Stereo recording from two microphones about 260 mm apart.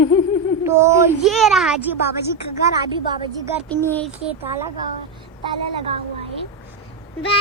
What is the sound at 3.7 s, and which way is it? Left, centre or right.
Speech, centre.